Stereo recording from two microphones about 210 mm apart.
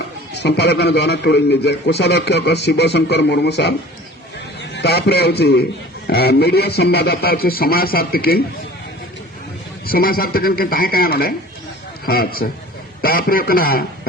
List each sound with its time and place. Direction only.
0.3 s a man's voice: 55° left (ahead or behind)
9.8 s a man's voice: 45° left (ahead or behind)